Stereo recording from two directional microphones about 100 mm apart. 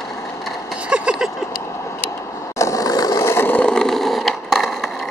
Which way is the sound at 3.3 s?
25° left (ahead or behind).